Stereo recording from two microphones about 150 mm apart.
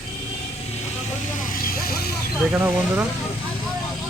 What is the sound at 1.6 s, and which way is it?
Vehicle, 80° left.